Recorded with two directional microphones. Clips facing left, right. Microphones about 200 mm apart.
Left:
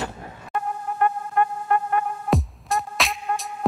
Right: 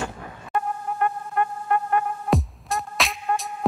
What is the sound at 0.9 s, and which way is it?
Vehicle, 5° right (ahead or behind).